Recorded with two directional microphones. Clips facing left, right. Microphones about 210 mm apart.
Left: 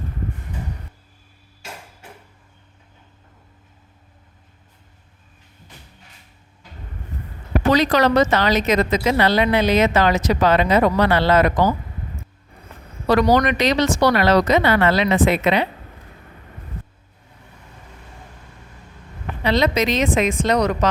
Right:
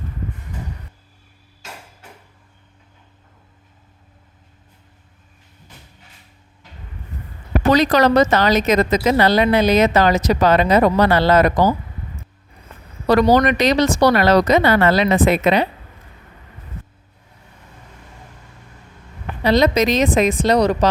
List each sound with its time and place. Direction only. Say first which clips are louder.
7.7 s a woman's voice: right 2 dB; 40° right (ahead or behind)
13.3 s a woman's voice: right 2 dB; 40° right (ahead or behind)
19.4 s a woman's voice: right 4 dB; 40° right (ahead or behind)